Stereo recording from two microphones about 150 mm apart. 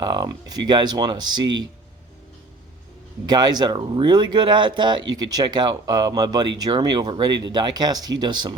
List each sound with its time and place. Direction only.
0.0 s speech: 30° right (ahead or behind)
3.2 s speech: 30° right (ahead or behind)